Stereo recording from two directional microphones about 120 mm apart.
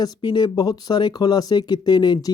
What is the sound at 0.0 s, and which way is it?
Speech, 40° left (ahead or behind).